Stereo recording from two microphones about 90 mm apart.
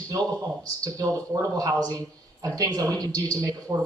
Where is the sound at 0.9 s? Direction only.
40° right (ahead or behind).